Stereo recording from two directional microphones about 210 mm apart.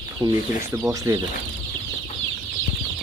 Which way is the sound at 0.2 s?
15° right (ahead or behind).